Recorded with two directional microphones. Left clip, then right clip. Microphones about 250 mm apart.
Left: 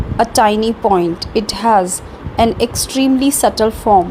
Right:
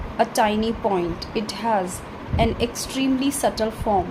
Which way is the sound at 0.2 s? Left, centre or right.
Left.